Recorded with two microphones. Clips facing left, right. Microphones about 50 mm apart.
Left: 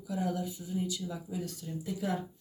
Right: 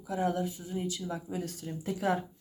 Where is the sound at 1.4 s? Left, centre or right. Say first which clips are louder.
Right 2 dB; right.